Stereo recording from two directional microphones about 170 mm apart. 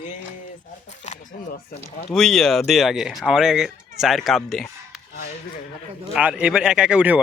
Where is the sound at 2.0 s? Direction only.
Centre (ahead or behind).